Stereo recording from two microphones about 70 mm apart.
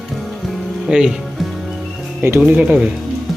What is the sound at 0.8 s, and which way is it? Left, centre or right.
Speech, centre.